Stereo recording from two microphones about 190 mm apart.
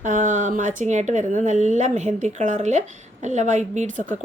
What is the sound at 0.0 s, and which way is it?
Speech, 40° right (ahead or behind).